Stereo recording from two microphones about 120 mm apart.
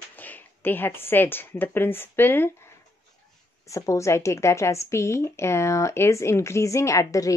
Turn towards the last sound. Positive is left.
turn(degrees=25)  # may be behind; listen again after turning